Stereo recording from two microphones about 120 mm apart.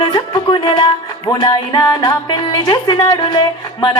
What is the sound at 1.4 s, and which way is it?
Music, 35° left (ahead or behind).